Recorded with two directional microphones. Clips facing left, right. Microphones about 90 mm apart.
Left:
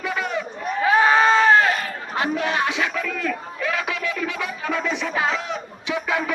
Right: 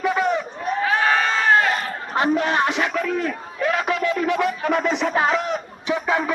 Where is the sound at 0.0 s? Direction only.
35° right (ahead or behind).